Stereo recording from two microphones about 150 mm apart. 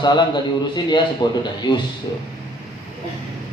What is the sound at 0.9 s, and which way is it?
Speech, 30° left (ahead or behind).